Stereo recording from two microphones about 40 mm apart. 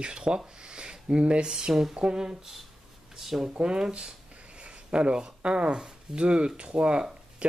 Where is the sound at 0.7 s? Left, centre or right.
Right.